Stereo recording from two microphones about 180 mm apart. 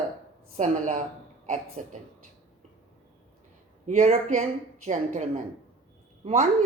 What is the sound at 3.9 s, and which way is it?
Speech, 40° right (ahead or behind).